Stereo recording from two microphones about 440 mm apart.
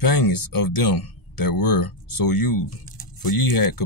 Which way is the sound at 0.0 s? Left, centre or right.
Left.